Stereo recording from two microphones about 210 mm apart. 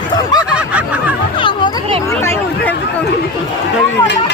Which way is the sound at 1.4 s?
25° left (ahead or behind).